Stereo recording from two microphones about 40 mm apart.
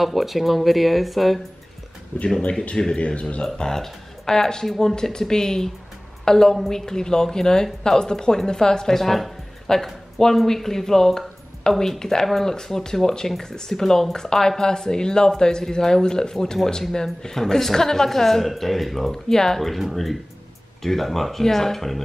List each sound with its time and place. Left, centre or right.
0.0 s speech: centre
2.1 s speech: left
3.4 s speech: centre
19.7 s speech: centre